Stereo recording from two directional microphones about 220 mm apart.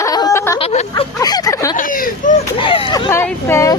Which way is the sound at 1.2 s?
15° left (ahead or behind).